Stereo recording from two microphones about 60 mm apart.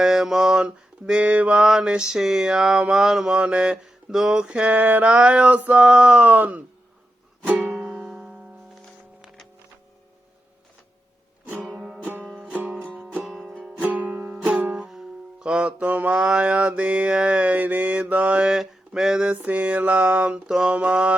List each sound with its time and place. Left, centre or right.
0.0 s mantra: centre; by 1.5 s right
1.5 s mantra: centre; by 6.6 s right
7.4 s music: right
13.2 s music: centre
13.7 s music: right
14.7 s music: centre; by 18.4 s right
18.4 s mantra: centre; by 20.4 s right
20.5 s mantra: centre
20.7 s mantra: centre